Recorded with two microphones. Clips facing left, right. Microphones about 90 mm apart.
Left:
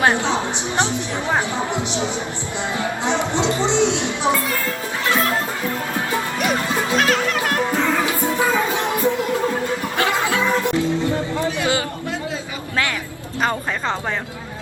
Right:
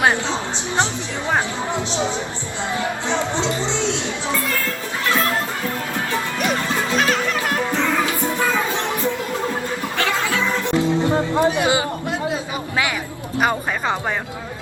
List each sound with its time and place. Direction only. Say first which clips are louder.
2.7 s music: left 1 dB; 20° left (ahead or behind)
6.9 s music: left 2 dB; centre (ahead or behind)
7.7 s music: left 1 dB; 10° left (ahead or behind)
10.8 s music: right 2 dB; 20° right (ahead or behind)
13.4 s speech: right 1 dB; 10° right (ahead or behind)